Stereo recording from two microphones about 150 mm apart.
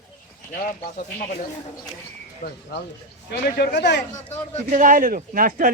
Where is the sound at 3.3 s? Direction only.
85° left.